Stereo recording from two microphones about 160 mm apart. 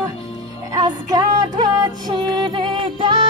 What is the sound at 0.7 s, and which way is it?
Music, 25° right (ahead or behind).